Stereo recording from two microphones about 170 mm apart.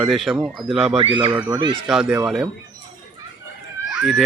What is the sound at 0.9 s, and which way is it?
Speech, 30° right (ahead or behind).